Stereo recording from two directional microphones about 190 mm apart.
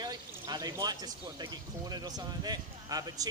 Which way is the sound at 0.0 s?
20° right (ahead or behind).